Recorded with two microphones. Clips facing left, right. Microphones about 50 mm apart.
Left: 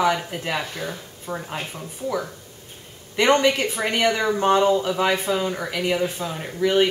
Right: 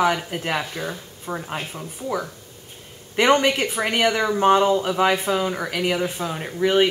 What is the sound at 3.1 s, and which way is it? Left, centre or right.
Speech, centre.